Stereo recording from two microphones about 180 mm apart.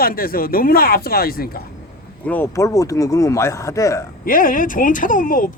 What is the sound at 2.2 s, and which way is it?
Speech, 10° left (ahead or behind).